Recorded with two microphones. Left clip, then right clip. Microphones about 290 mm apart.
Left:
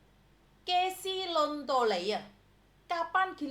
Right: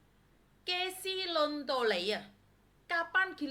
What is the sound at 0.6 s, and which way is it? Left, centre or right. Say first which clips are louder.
A woman's voice: left 5 dB; centre.